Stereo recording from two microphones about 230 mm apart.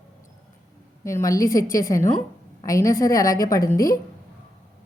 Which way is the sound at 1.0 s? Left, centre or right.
Centre.